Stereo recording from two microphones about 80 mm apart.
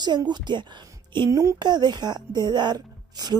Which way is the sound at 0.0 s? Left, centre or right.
Right.